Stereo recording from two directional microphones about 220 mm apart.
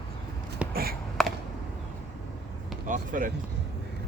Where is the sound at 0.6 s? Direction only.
5° right (ahead or behind).